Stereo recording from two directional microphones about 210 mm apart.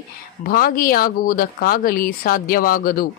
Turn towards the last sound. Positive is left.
turn(degrees=45)  # may be behind; listen again after turning